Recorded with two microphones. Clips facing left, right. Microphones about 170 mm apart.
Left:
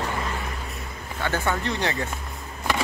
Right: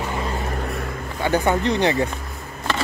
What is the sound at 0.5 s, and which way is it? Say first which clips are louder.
Vehicle: right 9 dB; 65° right (ahead or behind).